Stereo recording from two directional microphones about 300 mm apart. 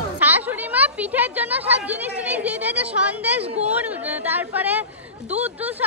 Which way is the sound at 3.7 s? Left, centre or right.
Centre.